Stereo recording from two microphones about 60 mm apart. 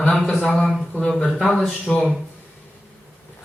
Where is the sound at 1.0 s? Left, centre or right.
Centre.